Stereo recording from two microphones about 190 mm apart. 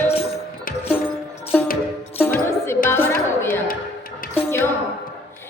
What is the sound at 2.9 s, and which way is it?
Chatter, 15° left (ahead or behind).